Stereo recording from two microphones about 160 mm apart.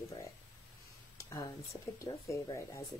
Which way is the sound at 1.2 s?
20° left (ahead or behind).